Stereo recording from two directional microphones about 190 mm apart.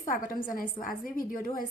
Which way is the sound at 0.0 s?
45° left (ahead or behind).